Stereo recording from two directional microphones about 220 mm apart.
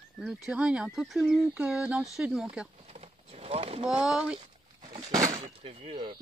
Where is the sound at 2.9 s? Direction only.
30° right (ahead or behind).